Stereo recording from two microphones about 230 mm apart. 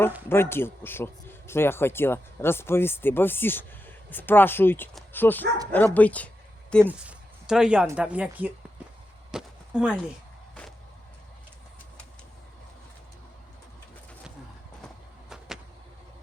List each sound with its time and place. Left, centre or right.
0.3 s speech: centre
6.8 s speech: centre
9.3 s chop: centre
15.3 s a sound: centre